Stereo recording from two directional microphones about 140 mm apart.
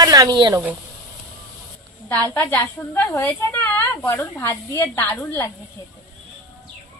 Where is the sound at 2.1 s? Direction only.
15° left (ahead or behind).